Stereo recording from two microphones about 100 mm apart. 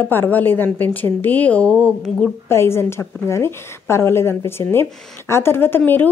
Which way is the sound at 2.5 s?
25° left (ahead or behind).